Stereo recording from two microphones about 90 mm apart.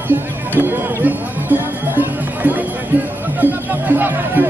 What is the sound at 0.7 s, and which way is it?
Music, 20° right (ahead or behind).